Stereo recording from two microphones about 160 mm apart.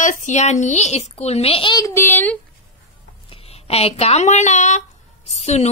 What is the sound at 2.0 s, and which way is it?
Speech, 10° left (ahead or behind).